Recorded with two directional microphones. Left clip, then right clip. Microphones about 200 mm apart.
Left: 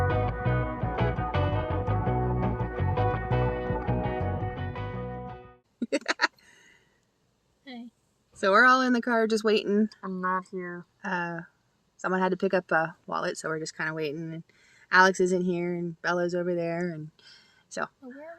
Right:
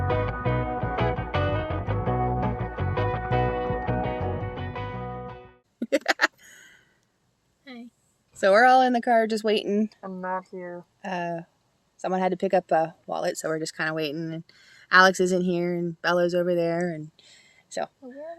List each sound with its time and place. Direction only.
0.1 s music: centre (ahead or behind)
5.8 s music: 30° right (ahead or behind)
7.6 s a sound: centre (ahead or behind)
8.4 s speech: 30° right (ahead or behind)
8.6 s speech: 10° right (ahead or behind)
10.0 s speech: 25° left (ahead or behind)
11.0 s speech: 10° right (ahead or behind)
13.3 s speech: 30° right (ahead or behind)
17.7 s speech: 5° right (ahead or behind)